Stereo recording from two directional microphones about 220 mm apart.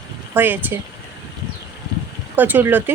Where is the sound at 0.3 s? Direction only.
10° right (ahead or behind).